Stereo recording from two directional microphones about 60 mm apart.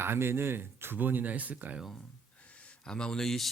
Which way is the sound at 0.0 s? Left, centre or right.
Right.